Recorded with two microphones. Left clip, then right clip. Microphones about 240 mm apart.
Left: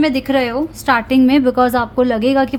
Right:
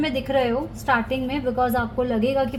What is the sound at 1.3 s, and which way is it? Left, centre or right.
A woman's voice, left.